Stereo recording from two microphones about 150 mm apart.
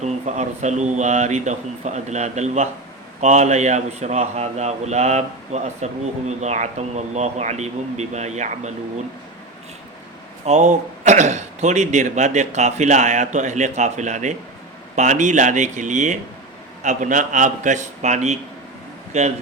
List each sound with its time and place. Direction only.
0.0 s a man's voice: 50° right (ahead or behind)
10.4 s a man's voice: 50° right (ahead or behind)